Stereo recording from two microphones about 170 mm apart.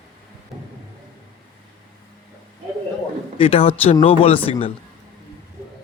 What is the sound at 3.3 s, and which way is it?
Speech, 35° left (ahead or behind).